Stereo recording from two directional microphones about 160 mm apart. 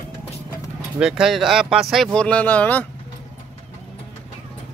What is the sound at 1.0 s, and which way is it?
Speech, 5° right (ahead or behind).